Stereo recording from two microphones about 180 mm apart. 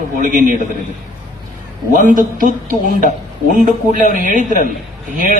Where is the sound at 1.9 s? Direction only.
50° right (ahead or behind).